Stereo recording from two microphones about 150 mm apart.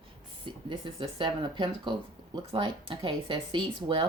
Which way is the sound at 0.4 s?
30° right (ahead or behind).